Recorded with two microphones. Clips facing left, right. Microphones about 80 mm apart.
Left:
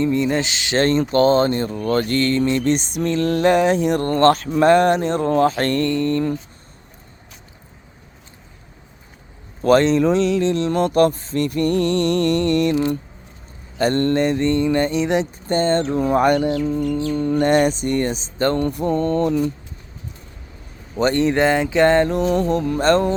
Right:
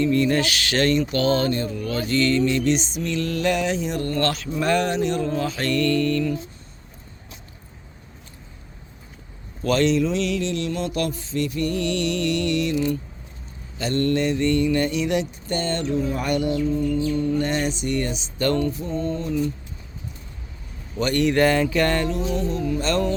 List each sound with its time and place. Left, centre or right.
0.0 s speech: left
5.2 s music: left
5.8 s speech: left
9.6 s speech: left
10.8 s music: left
13.7 s speech: left
16.0 s music: left
17.4 s speech: left
18.6 s mantra: left
20.9 s speech: left
22.0 s music: left
22.9 s speech: left